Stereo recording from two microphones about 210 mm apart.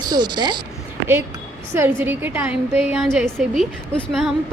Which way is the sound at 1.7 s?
10° right (ahead or behind).